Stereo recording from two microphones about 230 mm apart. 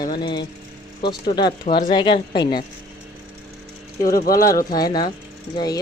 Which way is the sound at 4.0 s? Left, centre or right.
Left.